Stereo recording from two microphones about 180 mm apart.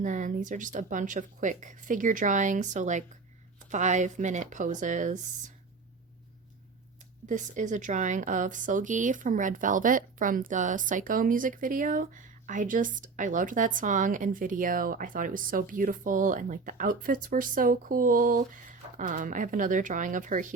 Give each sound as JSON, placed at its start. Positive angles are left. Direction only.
{"t": 0.0, "sound": "speech", "side_deg": -45}
{"t": 7.3, "sound": "speech", "side_deg": -45}